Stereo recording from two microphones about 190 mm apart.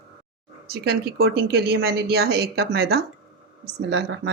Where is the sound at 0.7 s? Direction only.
55° right (ahead or behind).